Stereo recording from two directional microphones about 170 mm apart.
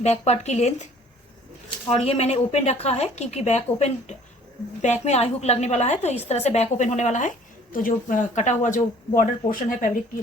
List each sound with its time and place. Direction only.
0.0 s a woman's voice: 40° left (ahead or behind)
1.9 s a woman's voice: 35° left (ahead or behind); by 10.0 s 50° left (ahead or behind)